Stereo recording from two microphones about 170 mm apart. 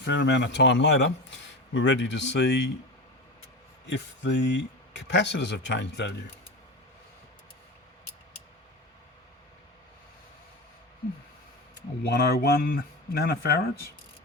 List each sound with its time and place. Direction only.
0.0 s speech: 90° left
3.8 s speech: 90° left
12.0 s speech: 70° left (ahead or behind)